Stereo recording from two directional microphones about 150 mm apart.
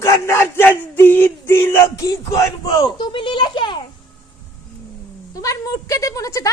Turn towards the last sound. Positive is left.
turn(degrees=20)  # may be behind; listen again after turning